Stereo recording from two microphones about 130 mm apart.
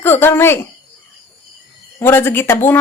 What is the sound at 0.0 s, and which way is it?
Speech, 15° left (ahead or behind).